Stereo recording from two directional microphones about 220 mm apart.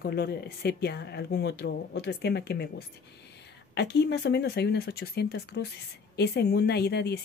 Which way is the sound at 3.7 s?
50° left (ahead or behind).